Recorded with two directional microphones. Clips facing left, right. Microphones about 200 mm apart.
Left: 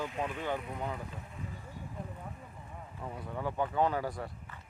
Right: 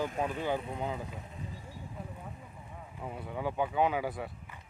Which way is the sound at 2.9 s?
5° right (ahead or behind).